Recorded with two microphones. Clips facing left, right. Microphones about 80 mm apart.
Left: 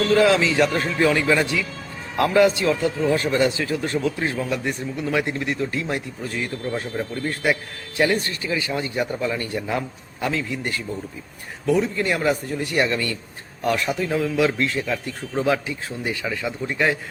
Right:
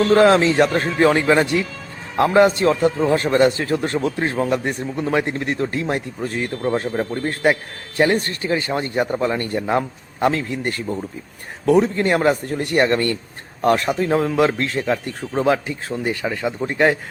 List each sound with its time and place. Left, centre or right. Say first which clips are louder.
0.1 s speech: right 4 dB; right
2.4 s a man's voice: right 4 dB; right